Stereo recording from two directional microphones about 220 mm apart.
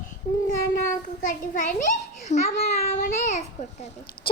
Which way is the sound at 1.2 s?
35° left (ahead or behind).